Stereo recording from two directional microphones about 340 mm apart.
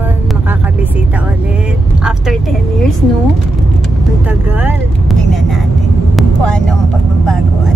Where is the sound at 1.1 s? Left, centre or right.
Centre.